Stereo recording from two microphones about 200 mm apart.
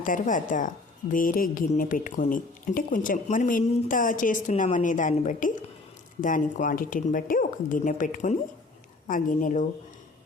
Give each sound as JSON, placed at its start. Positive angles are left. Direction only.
{"t": 0.0, "sound": "speech", "side_deg": 40}